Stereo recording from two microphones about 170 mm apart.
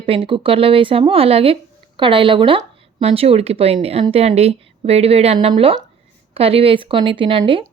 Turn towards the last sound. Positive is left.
turn(degrees=-30)  # may be behind; listen again after turning